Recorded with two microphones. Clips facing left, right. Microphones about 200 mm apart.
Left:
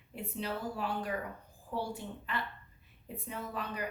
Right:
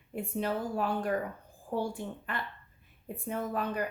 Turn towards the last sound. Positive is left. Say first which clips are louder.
# right 7 dB
turn(degrees=-50)  # may be behind; listen again after turning